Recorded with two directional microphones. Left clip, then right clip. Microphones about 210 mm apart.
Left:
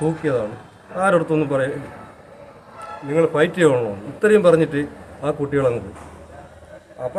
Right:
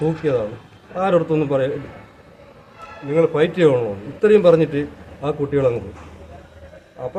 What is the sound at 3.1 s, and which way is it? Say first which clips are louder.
Speech: right 1 dB; 5° left (ahead or behind).